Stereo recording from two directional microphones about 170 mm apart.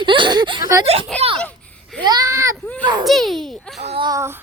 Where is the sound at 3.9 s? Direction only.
25° right (ahead or behind).